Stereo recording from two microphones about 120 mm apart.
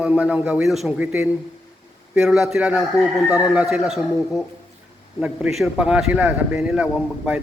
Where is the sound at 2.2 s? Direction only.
Centre (ahead or behind).